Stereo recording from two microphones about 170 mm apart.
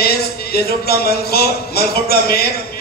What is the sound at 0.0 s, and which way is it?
Speech, 65° left (ahead or behind).